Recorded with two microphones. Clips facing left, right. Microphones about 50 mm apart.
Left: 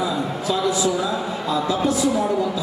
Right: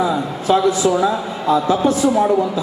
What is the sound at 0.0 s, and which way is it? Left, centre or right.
A man's voice, right.